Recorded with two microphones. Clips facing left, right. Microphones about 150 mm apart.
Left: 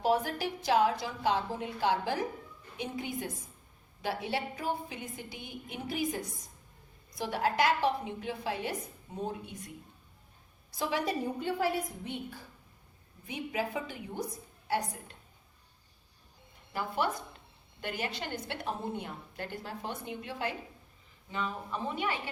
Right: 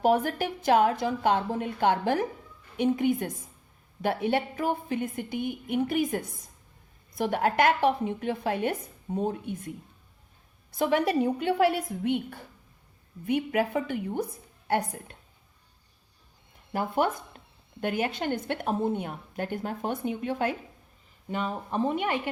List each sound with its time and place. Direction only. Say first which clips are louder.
0.0 s a woman's voice: right 5 dB; 55° right (ahead or behind)
16.7 s a woman's voice: right 6 dB; 50° right (ahead or behind)